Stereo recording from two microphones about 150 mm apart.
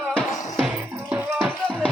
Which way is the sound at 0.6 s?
10° right (ahead or behind).